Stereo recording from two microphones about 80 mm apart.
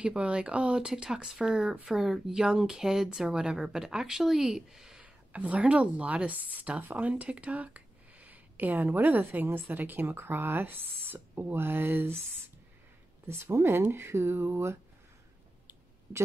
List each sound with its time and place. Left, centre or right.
0.0 s speech: centre
5.0 s speech: centre
13.3 s speech: right